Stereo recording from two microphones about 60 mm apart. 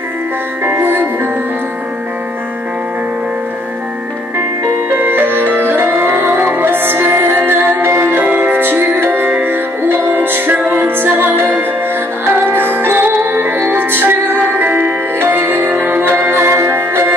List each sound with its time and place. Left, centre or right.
0.7 s music: right
4.9 s music: right